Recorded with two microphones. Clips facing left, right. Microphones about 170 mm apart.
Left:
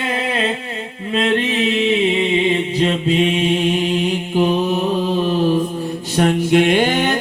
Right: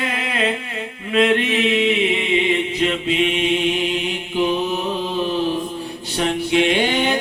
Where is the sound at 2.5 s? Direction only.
35° left (ahead or behind).